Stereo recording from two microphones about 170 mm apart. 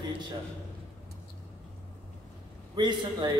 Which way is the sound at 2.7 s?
25° right (ahead or behind).